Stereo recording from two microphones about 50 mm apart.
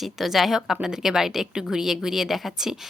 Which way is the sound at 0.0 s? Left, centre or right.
Centre.